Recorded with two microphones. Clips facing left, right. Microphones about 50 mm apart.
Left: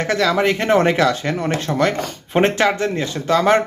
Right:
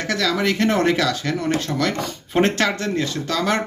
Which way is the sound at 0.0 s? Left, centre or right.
Left.